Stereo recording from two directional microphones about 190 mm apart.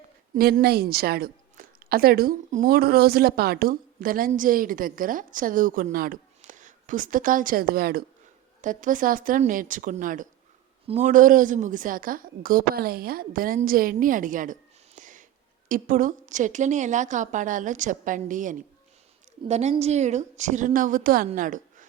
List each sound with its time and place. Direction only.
0.3 s a woman's voice: 55° right (ahead or behind)